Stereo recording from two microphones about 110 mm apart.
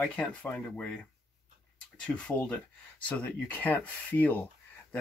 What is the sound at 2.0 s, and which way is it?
Speech, 10° left (ahead or behind).